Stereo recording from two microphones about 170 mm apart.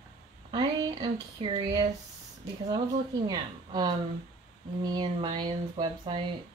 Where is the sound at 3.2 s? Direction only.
25° right (ahead or behind).